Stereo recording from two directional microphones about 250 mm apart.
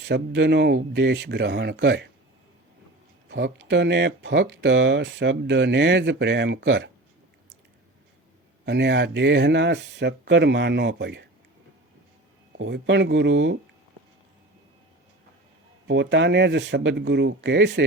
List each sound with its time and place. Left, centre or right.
0.0 s speech: right
3.2 s speech: right
8.6 s speech: right
12.5 s speech: right
15.9 s speech: right